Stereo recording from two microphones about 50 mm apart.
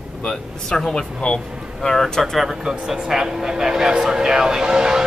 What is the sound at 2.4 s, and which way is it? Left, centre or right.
Speech, centre.